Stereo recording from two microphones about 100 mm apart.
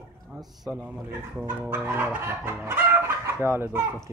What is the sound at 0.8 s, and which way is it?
Chicken, 15° right (ahead or behind).